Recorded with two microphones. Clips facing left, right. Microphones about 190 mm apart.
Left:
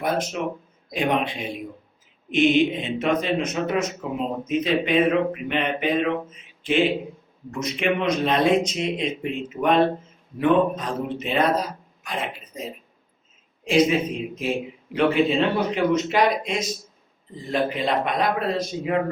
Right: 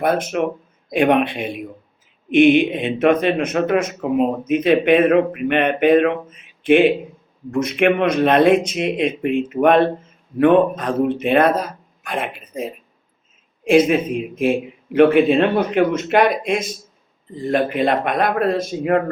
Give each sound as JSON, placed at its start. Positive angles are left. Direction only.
{"t": 0.0, "sound": "speech", "side_deg": -55}